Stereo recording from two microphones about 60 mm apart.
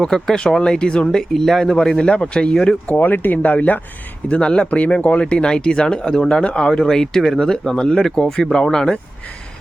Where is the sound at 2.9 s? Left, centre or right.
Left; by 8.9 s centre.